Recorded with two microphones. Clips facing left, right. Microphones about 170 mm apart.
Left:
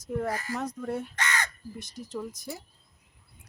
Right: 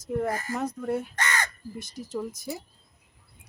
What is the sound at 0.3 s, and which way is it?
Speech, 50° right (ahead or behind).